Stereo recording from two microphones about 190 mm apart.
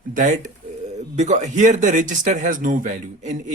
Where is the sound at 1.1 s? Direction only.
40° right (ahead or behind).